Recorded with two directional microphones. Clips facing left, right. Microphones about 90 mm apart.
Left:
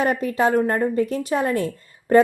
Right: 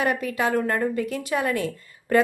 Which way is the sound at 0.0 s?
35° left (ahead or behind).